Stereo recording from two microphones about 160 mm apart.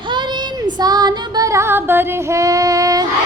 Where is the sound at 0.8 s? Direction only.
25° right (ahead or behind).